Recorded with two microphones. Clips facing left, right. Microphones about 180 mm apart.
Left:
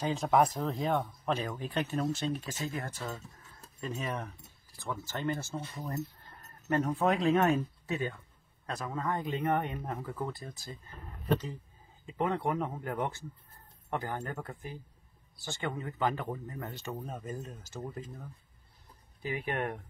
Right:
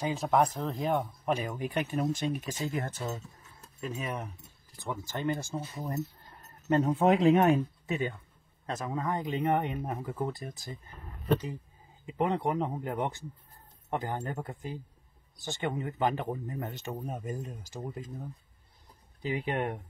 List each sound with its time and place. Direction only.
0.0 s speech: 5° right (ahead or behind)
0.9 s speech: 15° right (ahead or behind)
3.8 s speech: 5° right (ahead or behind)
12.1 s speech: 20° right (ahead or behind)
19.2 s speech: 20° right (ahead or behind)